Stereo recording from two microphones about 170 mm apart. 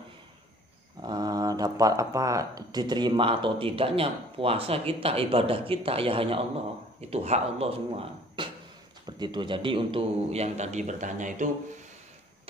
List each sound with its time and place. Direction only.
1.0 s speech: 25° right (ahead or behind); by 11.5 s 45° right (ahead or behind)